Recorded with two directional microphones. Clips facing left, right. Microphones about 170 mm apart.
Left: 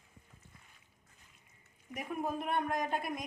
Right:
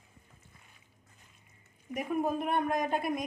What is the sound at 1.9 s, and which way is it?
Speech, 20° right (ahead or behind).